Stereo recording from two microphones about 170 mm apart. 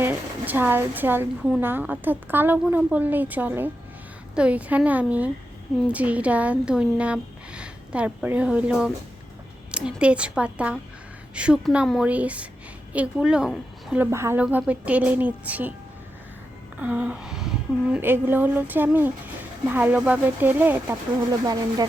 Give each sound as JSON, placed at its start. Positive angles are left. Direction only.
{"t": 0.0, "sound": "a woman's voice", "side_deg": -10}
{"t": 16.8, "sound": "a woman's voice", "side_deg": -10}
{"t": 21.4, "sound": "speech", "side_deg": -20}